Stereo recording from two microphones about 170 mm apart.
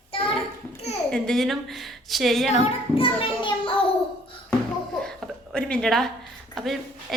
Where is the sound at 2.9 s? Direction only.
30° left (ahead or behind).